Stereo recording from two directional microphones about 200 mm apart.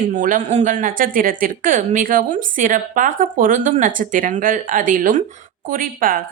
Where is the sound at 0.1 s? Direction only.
40° right (ahead or behind).